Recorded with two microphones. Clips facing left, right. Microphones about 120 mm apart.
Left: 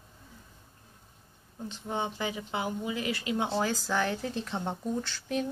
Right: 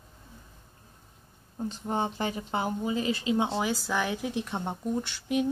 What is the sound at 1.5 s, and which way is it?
Speech, 40° right (ahead or behind).